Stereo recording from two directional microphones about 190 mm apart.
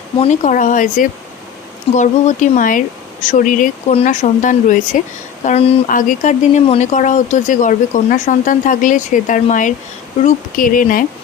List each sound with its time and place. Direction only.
0.2 s speech: 40° left (ahead or behind)
5.5 s speech: 30° left (ahead or behind)
5.9 s speech: 45° left (ahead or behind)